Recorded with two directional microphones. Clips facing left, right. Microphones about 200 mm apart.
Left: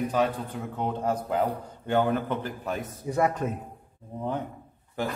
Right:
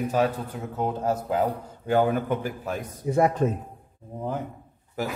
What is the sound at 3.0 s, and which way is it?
Speech, 25° right (ahead or behind).